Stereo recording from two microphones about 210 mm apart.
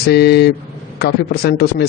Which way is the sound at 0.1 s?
50° left (ahead or behind).